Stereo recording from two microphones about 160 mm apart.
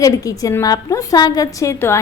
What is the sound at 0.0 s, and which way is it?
A woman's voice, 20° left (ahead or behind).